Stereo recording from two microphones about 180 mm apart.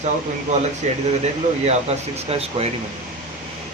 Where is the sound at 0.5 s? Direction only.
40° right (ahead or behind).